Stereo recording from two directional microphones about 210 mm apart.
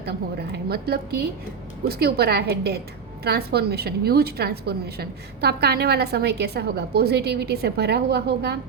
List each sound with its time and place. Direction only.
0.5 s a woman's voice: 50° right (ahead or behind)